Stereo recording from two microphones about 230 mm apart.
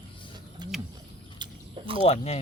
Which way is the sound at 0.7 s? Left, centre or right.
Centre.